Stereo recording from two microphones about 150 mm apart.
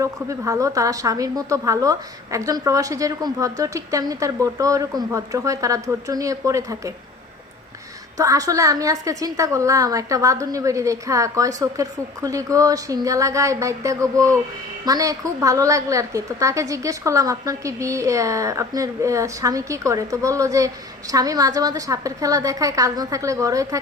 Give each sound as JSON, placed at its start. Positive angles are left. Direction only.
{"t": 0.0, "sound": "a woman's voice", "side_deg": -20}
{"t": 8.2, "sound": "a woman's voice", "side_deg": -20}